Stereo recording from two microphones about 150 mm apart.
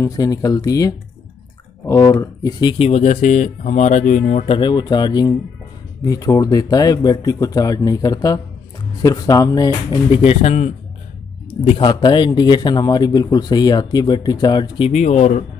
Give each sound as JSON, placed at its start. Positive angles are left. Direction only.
{"t": 0.0, "sound": "a man's voice", "side_deg": 25}
{"t": 2.8, "sound": "speech", "side_deg": 45}
{"t": 4.5, "sound": "a man's voice", "side_deg": 30}
{"t": 10.1, "sound": "speech", "side_deg": 45}
{"t": 11.6, "sound": "a man's voice", "side_deg": 35}
{"t": 14.9, "sound": "speech", "side_deg": 50}